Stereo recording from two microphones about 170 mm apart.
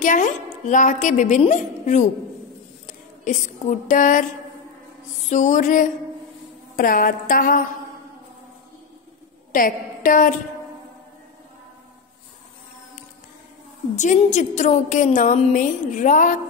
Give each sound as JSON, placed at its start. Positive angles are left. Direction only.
{"t": 0.0, "sound": "a woman's voice", "side_deg": 50}
{"t": 3.3, "sound": "a woman's voice", "side_deg": 45}
{"t": 5.3, "sound": "a woman's voice", "side_deg": 45}
{"t": 9.5, "sound": "a woman's voice", "side_deg": 55}
{"t": 13.9, "sound": "a woman's voice", "side_deg": 45}